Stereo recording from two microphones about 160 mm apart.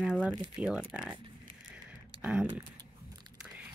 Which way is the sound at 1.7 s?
5° right (ahead or behind).